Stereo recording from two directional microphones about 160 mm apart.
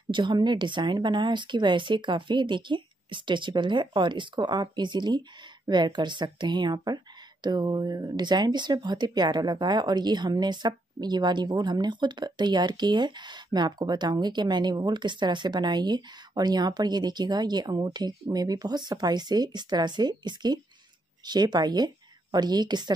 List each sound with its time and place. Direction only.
0.1 s speech: 30° right (ahead or behind)